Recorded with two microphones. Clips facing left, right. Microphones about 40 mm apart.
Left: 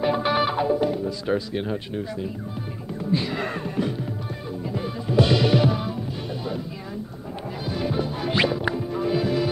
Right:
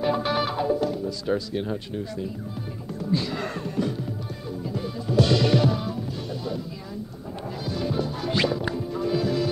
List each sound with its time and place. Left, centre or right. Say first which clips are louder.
0.0 s music: left 2 dB; left
3.0 s speech: left 2 dB; left
4.7 s music: left 2 dB; left
7.6 s music: left 1 dB; left